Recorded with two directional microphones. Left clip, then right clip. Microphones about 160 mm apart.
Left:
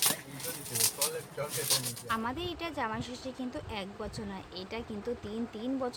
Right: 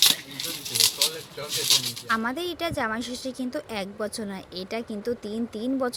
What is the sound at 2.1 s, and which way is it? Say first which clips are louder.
A woman's voice: right 6 dB; 35° right (ahead or behind).